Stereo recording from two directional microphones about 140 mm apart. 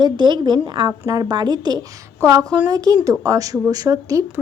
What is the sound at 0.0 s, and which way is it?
A woman's voice, 35° right (ahead or behind).